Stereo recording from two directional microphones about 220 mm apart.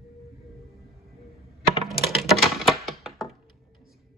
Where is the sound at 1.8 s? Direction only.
Centre (ahead or behind).